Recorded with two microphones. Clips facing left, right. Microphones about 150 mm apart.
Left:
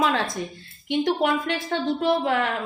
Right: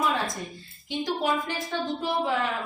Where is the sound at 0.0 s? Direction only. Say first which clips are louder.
Left 4 dB; 80° left.